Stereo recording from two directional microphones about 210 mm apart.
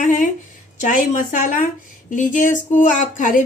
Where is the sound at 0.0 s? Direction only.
40° left (ahead or behind).